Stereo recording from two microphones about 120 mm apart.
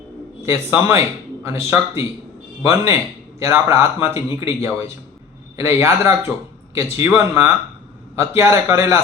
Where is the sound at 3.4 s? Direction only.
20° right (ahead or behind).